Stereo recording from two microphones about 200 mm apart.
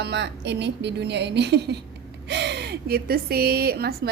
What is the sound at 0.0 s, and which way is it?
A woman's voice, 55° right (ahead or behind).